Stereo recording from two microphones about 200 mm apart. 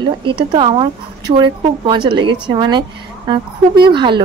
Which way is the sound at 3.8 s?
25° right (ahead or behind).